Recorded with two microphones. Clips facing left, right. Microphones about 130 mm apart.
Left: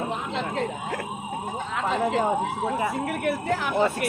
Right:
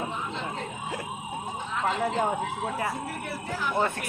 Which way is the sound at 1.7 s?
90° left.